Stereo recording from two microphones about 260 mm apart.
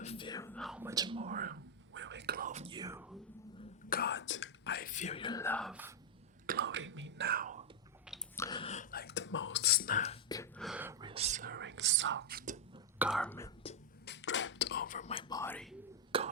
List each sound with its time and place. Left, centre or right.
0.0 s whispering: left; by 3.2 s centre
3.6 s whispering: left; by 5.9 s centre
6.4 s whispering: right
8.4 s whispering: centre
10.6 s whispering: centre
11.0 s whispering: right
11.5 s whispering: right
13.0 s speech: centre
14.0 s whispering: left; by 15.7 s centre
16.1 s a sound: centre